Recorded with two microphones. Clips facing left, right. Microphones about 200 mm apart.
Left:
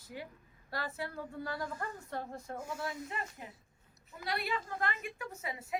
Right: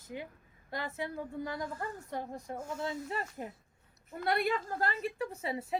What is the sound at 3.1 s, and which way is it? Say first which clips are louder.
Speech: right 5 dB; 40° right (ahead or behind).